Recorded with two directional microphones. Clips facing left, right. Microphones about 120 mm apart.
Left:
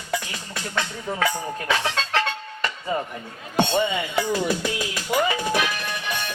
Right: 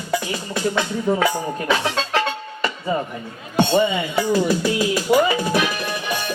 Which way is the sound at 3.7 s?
35° right (ahead or behind).